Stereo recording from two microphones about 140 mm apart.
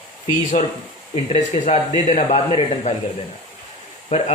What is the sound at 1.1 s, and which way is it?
A man's voice, 55° left (ahead or behind).